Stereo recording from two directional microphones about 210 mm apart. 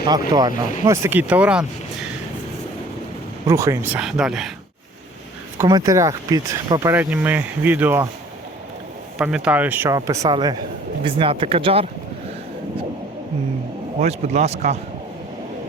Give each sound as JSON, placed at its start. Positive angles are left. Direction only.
{"t": 0.3, "sound": "speech", "side_deg": -20}
{"t": 3.4, "sound": "speech", "side_deg": -15}
{"t": 4.0, "sound": "speech", "side_deg": 0}
{"t": 5.5, "sound": "speech", "side_deg": -15}
{"t": 9.1, "sound": "speech", "side_deg": -5}
{"t": 14.0, "sound": "speech", "side_deg": -30}